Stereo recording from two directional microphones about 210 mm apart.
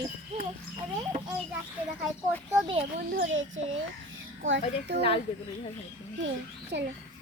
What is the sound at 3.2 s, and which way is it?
Speech, 65° right (ahead or behind).